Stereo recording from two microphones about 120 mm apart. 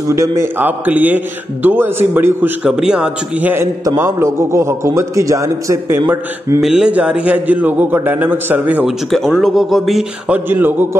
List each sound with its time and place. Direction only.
0.1 s a man's voice: 20° right (ahead or behind)
2.7 s a man's voice: 5° right (ahead or behind)
6.6 s a man's voice: 5° right (ahead or behind)
8.8 s speech: centre (ahead or behind)
10.3 s a man's voice: 15° right (ahead or behind)